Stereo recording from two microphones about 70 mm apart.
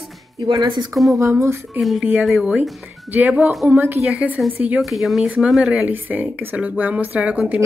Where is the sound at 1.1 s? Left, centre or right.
Right.